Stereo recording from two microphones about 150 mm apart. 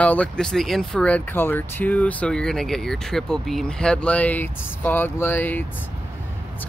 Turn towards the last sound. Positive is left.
turn(degrees=10)  # may be behind; listen again after turning